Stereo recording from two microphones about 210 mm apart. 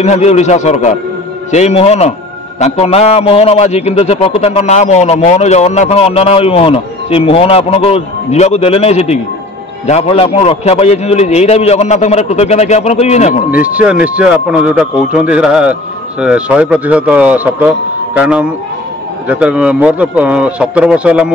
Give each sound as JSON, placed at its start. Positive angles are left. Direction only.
{"t": 0.0, "sound": "a man's voice", "side_deg": 30}
{"t": 13.5, "sound": "speech", "side_deg": -5}